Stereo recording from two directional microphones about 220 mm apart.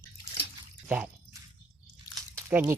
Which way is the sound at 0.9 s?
5° right (ahead or behind).